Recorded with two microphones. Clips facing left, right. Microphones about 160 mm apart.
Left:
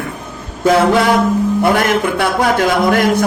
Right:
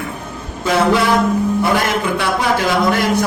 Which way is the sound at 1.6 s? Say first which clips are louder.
Left 3 dB; 55° left (ahead or behind).